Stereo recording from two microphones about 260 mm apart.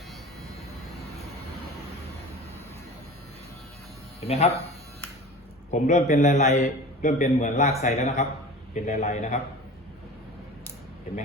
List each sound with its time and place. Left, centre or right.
4.3 s a man's voice: left
5.7 s a man's voice: left